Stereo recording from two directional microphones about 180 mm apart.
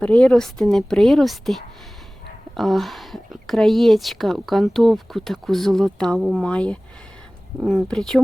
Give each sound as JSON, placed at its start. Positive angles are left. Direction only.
{"t": 0.0, "sound": "speech", "side_deg": 5}